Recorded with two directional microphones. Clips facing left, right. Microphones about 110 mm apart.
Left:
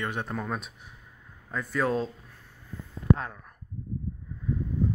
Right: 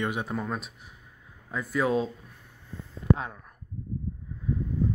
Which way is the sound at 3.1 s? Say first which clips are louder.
Even; 10° right (ahead or behind).